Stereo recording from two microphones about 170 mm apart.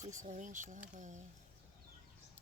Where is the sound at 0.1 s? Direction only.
45° right (ahead or behind).